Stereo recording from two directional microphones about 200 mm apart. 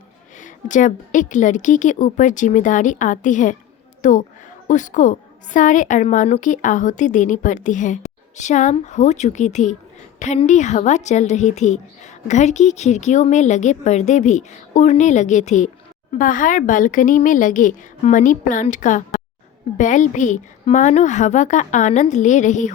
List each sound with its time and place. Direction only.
0.3 s a woman's voice: 40° left (ahead or behind)